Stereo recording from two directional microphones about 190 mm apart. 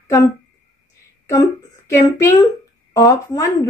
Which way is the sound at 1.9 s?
15° left (ahead or behind).